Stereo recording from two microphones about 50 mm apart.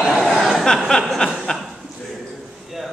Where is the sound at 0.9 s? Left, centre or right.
Centre.